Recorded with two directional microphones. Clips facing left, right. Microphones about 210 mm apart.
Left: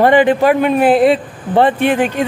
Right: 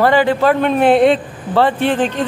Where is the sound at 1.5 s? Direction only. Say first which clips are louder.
Left 2 dB; 15° left (ahead or behind).